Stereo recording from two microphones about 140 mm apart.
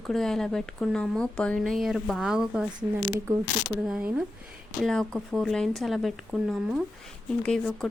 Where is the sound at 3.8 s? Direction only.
5° right (ahead or behind).